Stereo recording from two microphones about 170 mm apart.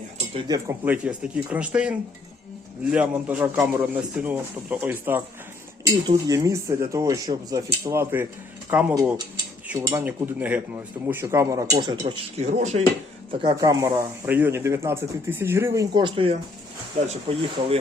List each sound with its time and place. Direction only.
0.3 s speech: 20° right (ahead or behind)
0.9 s speech: 10° right (ahead or behind)
6.1 s speech: 20° right (ahead or behind)
12.4 s speech: 45° right (ahead or behind)
13.4 s speech: 25° right (ahead or behind)